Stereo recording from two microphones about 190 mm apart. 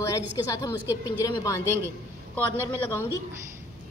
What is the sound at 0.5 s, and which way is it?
A woman's voice, 15° left (ahead or behind).